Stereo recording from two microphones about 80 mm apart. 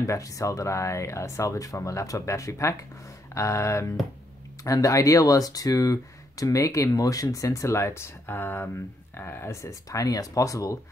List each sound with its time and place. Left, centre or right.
0.0 s speech: left